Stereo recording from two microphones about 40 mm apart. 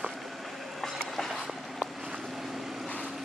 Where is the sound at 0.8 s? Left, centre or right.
Centre.